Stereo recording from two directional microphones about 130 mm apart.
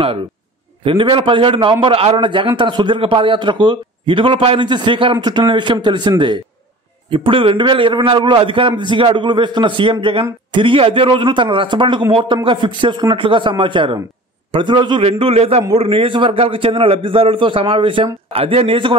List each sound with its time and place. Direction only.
0.8 s a man's voice: 40° right (ahead or behind)
15.0 s a man's voice: 50° right (ahead or behind)